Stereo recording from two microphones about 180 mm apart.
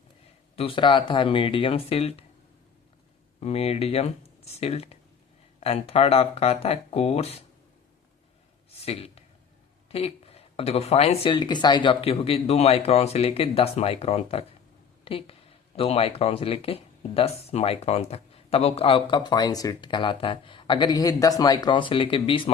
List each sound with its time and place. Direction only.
0.5 s speech: 30° left (ahead or behind)
3.4 s speech: 35° left (ahead or behind)
8.8 s speech: 35° left (ahead or behind)